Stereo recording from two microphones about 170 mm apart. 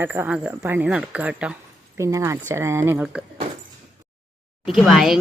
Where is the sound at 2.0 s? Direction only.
20° right (ahead or behind).